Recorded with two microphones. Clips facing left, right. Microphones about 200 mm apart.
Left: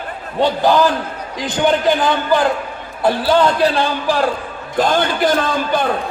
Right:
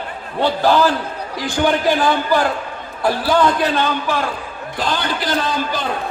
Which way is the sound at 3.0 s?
25° left (ahead or behind).